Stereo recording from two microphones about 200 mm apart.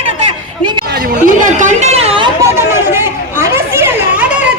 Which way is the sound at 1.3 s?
40° right (ahead or behind).